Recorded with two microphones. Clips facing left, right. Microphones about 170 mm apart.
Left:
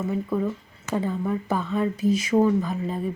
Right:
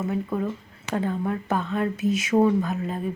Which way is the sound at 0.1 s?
5° right (ahead or behind).